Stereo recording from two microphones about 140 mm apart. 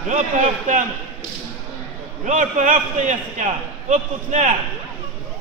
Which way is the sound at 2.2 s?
65° right (ahead or behind).